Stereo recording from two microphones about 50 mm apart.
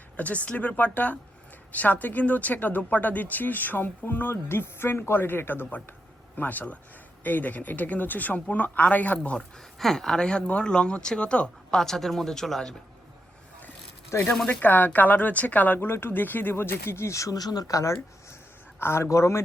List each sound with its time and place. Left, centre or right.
0.2 s speech: left
6.3 s speech: left
9.7 s speech: centre
11.8 s speech: centre
14.1 s speech: left
14.6 s speech: left
15.9 s speech: left
18.8 s speech: left